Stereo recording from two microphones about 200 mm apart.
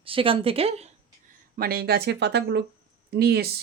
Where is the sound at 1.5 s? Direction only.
50° right (ahead or behind).